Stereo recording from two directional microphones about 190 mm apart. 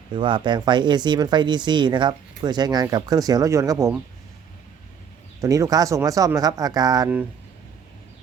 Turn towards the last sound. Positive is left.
turn(degrees=-20)  # may be behind; listen again after turning